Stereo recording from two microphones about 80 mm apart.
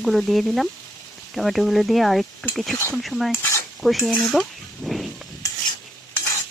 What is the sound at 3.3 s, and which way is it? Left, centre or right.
Stir, left.